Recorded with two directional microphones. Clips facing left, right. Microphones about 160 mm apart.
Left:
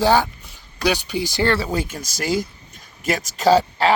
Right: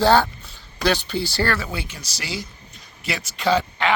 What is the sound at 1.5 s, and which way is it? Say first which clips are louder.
Speech: left 6 dB; 35° left (ahead or behind).